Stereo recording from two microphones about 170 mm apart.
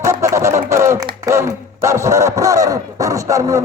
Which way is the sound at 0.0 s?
15° right (ahead or behind).